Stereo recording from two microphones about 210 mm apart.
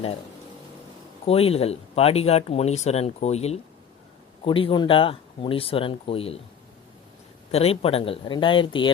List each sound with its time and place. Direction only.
1.2 s speech: 30° left (ahead or behind)
7.5 s speech: 30° left (ahead or behind)